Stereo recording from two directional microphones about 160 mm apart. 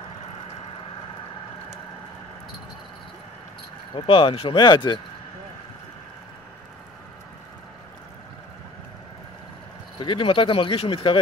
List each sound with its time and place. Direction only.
3.9 s speech: 30° left (ahead or behind)
9.9 s speech: 30° left (ahead or behind)